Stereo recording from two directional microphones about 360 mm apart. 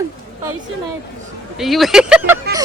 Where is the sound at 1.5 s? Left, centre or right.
Centre.